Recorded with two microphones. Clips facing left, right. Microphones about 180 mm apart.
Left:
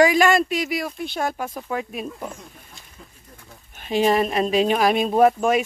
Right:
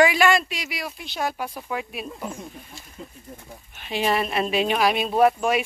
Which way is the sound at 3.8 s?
40° left (ahead or behind).